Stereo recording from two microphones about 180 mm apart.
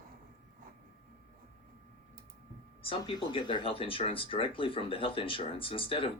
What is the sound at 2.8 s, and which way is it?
Speech, 25° left (ahead or behind).